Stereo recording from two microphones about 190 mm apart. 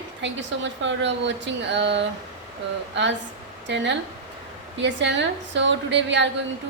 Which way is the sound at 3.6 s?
70° right (ahead or behind).